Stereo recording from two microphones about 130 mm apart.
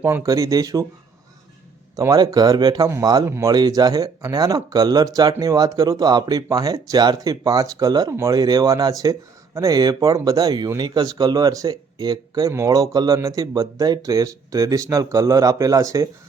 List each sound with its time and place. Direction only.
0.0 s speech: 20° right (ahead or behind)
2.0 s speech: 25° right (ahead or behind)